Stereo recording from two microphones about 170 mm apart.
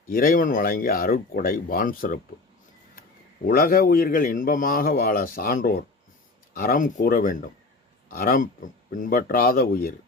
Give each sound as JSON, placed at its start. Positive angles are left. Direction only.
{"t": 0.1, "sound": "a man's voice", "side_deg": 55}
{"t": 3.4, "sound": "a man's voice", "side_deg": 60}